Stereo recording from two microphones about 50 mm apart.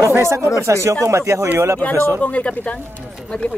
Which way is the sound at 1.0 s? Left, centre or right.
Right.